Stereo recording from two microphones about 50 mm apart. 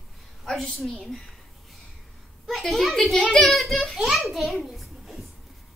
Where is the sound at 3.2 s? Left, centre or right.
Centre.